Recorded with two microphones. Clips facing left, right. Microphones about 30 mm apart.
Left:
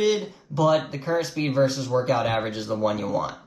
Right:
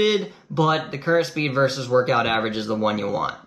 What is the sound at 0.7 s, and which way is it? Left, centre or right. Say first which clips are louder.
Speech: right 3 dB; right.